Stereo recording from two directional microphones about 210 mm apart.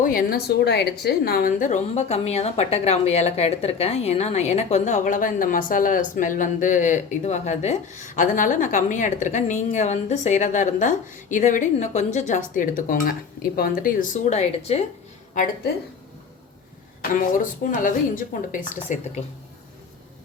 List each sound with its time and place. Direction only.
0.0 s a woman's voice: 45° left (ahead or behind)
17.0 s a woman's voice: 40° left (ahead or behind)